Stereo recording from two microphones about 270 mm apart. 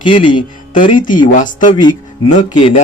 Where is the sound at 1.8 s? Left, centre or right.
Centre.